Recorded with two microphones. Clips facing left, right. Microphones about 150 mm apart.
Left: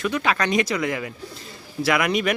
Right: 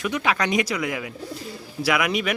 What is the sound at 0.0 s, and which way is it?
Speech, 15° right (ahead or behind).